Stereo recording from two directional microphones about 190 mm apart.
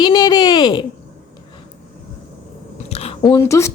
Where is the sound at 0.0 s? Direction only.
20° left (ahead or behind).